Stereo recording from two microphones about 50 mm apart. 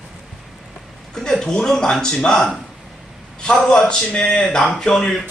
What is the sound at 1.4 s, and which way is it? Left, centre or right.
A man's voice, centre.